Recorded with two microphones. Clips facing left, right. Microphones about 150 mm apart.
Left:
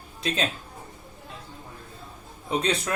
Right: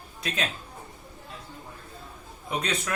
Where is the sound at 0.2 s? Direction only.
30° left (ahead or behind).